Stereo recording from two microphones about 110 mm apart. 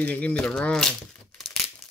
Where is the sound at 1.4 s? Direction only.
Centre (ahead or behind).